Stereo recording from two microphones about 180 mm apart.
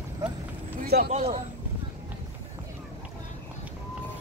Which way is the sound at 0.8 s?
60° right (ahead or behind).